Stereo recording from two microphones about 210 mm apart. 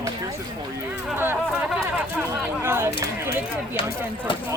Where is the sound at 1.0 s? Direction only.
10° right (ahead or behind).